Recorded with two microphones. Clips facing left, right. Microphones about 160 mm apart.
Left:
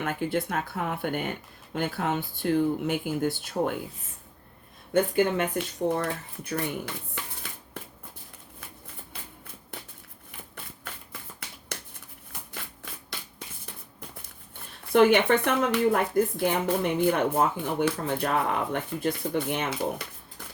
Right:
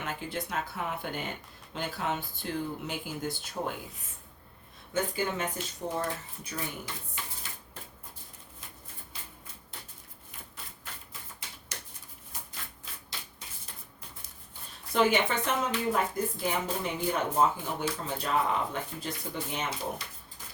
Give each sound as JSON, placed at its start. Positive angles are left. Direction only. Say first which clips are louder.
{"t": 0.0, "sound": "speech", "louder": "left 8 dB", "side_deg": 55}
{"t": 4.9, "sound": "speech", "louder": "left 8 dB", "side_deg": 60}
{"t": 12.3, "sound": "shuffling cards", "louder": "left 4 dB", "side_deg": 65}
{"t": 14.9, "sound": "speech", "louder": "left 7 dB", "side_deg": 60}